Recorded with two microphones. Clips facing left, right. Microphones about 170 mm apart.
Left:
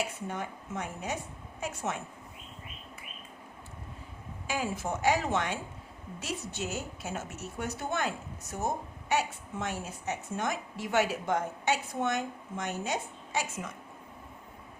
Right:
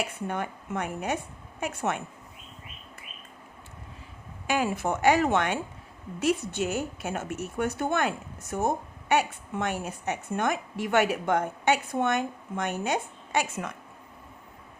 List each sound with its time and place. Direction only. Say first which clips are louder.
0.0 s speech: right 4 dB; 60° right (ahead or behind)
4.4 s speech: right 6 dB; 65° right (ahead or behind)